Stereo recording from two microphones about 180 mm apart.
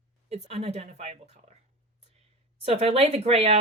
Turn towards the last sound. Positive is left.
turn(degrees=-35)  # may be behind; listen again after turning